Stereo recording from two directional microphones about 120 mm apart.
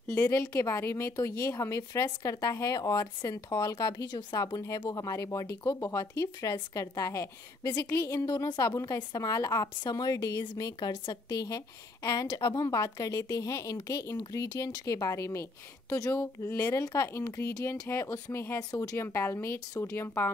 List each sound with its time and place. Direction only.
0.2 s a woman's voice: 25° left (ahead or behind)